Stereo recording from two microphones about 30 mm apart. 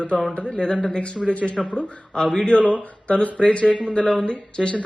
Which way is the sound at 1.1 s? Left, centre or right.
Left.